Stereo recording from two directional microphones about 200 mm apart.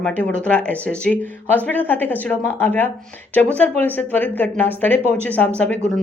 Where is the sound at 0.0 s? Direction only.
5° left (ahead or behind).